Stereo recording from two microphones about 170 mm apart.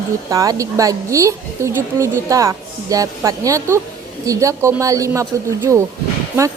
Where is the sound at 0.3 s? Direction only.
20° right (ahead or behind).